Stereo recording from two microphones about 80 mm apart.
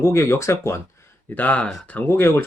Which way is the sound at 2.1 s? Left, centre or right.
Left.